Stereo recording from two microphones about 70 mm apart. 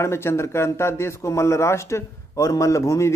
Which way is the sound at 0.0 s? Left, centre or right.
Left.